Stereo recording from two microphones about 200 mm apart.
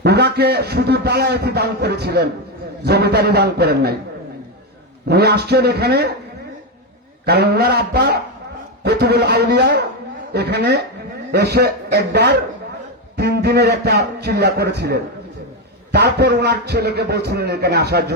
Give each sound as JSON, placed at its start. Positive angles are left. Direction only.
{"t": 0.0, "sound": "a man's voice", "side_deg": -55}
{"t": 5.0, "sound": "a man's voice", "side_deg": -55}
{"t": 7.3, "sound": "a man's voice", "side_deg": -55}